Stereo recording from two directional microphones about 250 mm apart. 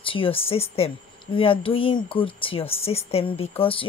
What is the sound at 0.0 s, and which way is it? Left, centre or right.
Speech, left.